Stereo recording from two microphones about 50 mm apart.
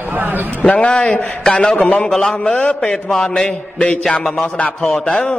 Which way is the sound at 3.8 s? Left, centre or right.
Centre.